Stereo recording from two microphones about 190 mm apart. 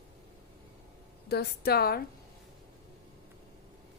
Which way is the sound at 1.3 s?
55° left (ahead or behind).